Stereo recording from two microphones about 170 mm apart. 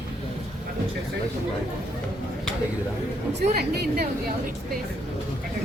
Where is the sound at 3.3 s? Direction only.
75° right (ahead or behind).